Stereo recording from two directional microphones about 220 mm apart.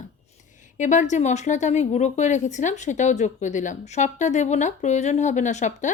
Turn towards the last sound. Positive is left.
turn(degrees=35)  # may be behind; listen again after turning